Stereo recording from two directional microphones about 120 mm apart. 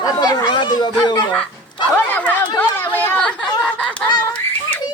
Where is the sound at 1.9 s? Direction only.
15° left (ahead or behind).